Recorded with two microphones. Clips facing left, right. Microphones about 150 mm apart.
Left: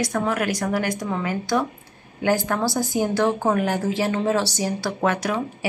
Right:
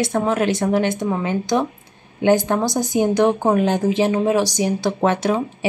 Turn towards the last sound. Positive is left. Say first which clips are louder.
# right 4 dB
turn(degrees=-25)  # may be behind; listen again after turning